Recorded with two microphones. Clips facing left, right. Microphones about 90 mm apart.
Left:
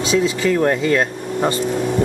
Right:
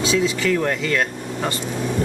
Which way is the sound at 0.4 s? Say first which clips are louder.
Left 4 dB; 30° left (ahead or behind).